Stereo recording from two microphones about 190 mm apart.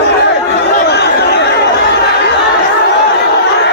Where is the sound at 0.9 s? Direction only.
60° left (ahead or behind).